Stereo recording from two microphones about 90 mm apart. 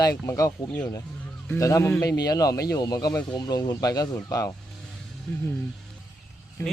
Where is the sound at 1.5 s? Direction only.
35° left (ahead or behind).